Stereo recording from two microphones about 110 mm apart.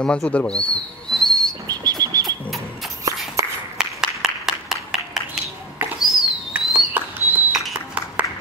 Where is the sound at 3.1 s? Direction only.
30° right (ahead or behind).